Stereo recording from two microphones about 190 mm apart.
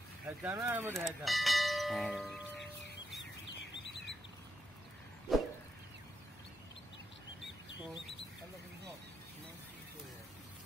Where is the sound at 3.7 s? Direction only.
70° left (ahead or behind).